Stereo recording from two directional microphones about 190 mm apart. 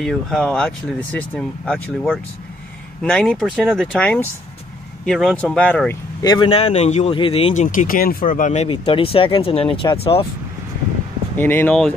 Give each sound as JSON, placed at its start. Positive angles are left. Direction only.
{"t": 0.0, "sound": "speech", "side_deg": 0}
{"t": 6.2, "sound": "speech", "side_deg": 25}
{"t": 11.3, "sound": "speech", "side_deg": 10}